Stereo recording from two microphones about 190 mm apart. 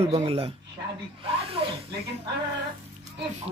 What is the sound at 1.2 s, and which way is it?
Snake, 30° right (ahead or behind).